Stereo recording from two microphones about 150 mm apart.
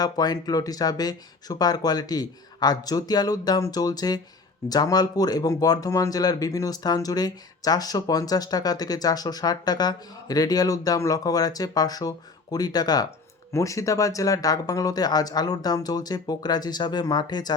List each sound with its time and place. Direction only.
0.0 s speech: 25° left (ahead or behind)